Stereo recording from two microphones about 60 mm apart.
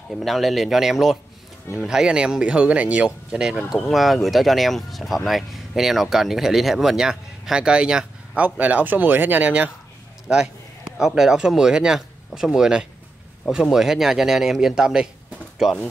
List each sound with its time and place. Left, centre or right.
0.2 s speech: centre
8.5 s speech: right
10.2 s speech: centre